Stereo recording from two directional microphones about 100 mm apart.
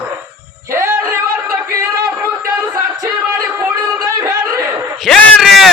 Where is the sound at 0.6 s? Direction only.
30° right (ahead or behind).